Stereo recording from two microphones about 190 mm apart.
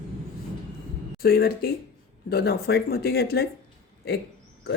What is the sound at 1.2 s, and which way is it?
Speech, 55° left (ahead or behind).